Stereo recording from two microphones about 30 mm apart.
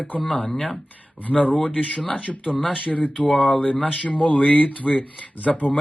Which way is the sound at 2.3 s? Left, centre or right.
Centre.